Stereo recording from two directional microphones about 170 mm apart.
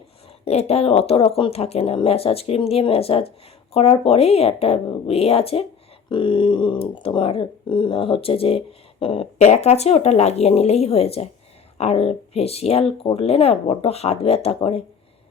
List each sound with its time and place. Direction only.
0.4 s speech: 35° left (ahead or behind)